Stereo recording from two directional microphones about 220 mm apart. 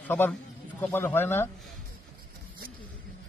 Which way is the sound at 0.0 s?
10° left (ahead or behind).